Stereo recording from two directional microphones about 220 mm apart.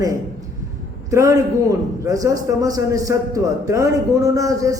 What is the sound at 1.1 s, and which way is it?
A man's voice, 15° right (ahead or behind).